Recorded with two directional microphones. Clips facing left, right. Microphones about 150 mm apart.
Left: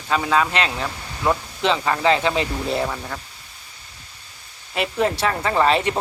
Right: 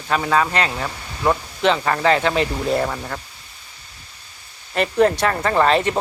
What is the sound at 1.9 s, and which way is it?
Speech, 45° right (ahead or behind).